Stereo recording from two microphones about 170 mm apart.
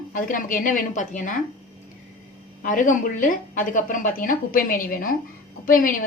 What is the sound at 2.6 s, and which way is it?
A woman's voice, 50° left (ahead or behind).